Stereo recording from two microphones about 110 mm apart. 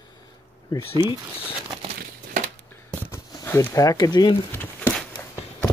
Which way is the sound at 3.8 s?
35° left (ahead or behind).